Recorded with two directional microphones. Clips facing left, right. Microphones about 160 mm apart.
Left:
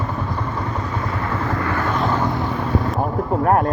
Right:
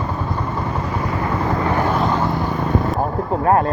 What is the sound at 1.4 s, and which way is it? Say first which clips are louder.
Vehicle: right 4 dB; 20° right (ahead or behind).